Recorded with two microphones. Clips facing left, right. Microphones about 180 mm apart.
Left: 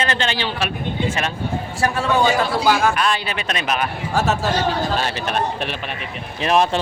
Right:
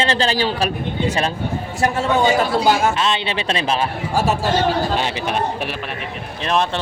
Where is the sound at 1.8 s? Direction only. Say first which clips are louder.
Right 1 dB; 20° right (ahead or behind).